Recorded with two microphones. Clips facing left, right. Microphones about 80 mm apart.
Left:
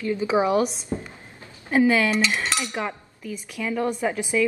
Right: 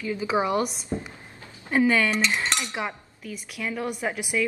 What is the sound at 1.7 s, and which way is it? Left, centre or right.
A woman's voice, centre.